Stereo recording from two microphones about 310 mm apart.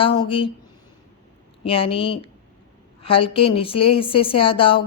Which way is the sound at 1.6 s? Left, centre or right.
Centre.